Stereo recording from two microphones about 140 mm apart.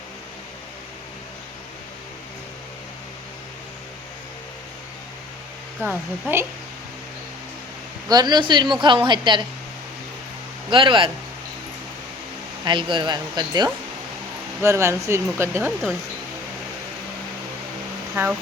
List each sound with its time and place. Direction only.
5.8 s speech: 15° right (ahead or behind)
8.0 s a woman's voice: 30° right (ahead or behind)
10.7 s a woman's voice: 35° right (ahead or behind)
12.6 s a woman's voice: 35° right (ahead or behind)
14.6 s speech: 20° right (ahead or behind)
18.1 s speech: 10° right (ahead or behind)